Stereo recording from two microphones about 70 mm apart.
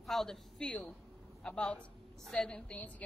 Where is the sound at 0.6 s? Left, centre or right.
Centre.